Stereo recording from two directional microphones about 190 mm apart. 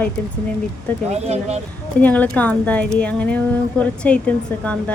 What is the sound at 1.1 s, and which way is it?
Speech, 35° right (ahead or behind).